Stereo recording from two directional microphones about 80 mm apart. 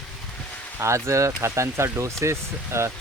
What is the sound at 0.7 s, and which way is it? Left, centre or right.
Speech, right.